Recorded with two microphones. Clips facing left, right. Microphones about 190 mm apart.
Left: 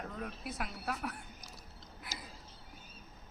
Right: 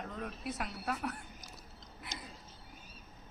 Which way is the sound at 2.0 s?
5° left (ahead or behind).